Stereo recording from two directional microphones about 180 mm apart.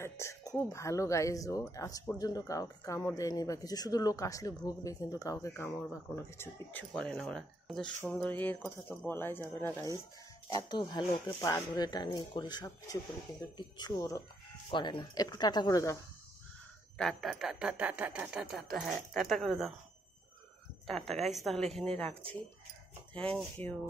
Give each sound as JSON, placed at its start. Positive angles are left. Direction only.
{"t": 0.0, "sound": "speech", "side_deg": 15}
{"t": 10.5, "sound": "speech", "side_deg": 25}
{"t": 17.0, "sound": "speech", "side_deg": 0}
{"t": 20.8, "sound": "speech", "side_deg": 0}
{"t": 23.1, "sound": "speech", "side_deg": 5}